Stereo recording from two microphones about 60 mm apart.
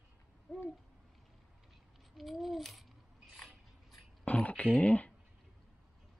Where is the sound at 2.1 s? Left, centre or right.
Centre.